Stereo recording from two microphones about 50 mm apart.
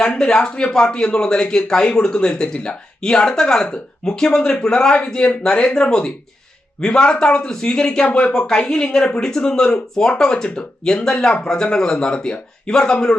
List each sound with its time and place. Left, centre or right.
0.2 s a man's voice: centre